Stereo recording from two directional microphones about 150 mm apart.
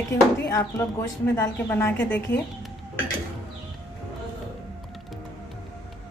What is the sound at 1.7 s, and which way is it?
Speech, 15° left (ahead or behind).